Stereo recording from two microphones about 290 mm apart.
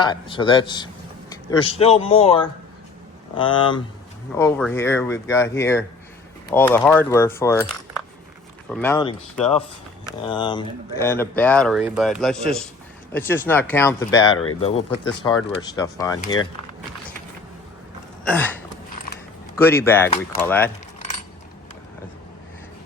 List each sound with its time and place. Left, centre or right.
0.0 s a man's voice: centre
8.7 s speech: centre
10.2 s speech: centre
18.3 s speech: centre
19.5 s speech: centre